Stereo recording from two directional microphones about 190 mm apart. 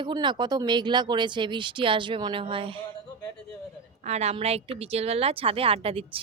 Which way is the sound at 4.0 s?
35° right (ahead or behind).